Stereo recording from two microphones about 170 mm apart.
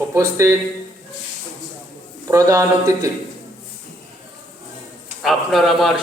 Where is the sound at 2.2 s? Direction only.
20° right (ahead or behind).